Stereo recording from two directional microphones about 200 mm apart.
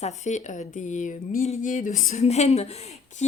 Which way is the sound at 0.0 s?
35° left (ahead or behind).